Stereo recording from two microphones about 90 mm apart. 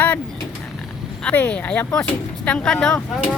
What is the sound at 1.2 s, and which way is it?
Speech, 15° left (ahead or behind).